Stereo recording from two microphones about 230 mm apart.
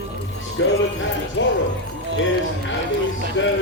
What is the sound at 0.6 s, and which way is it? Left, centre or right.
Music, left.